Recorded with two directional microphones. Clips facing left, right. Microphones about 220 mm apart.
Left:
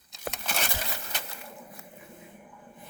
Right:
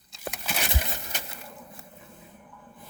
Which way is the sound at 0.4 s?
5° right (ahead or behind).